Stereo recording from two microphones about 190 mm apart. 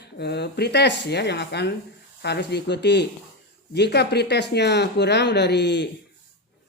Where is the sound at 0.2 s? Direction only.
60° left (ahead or behind).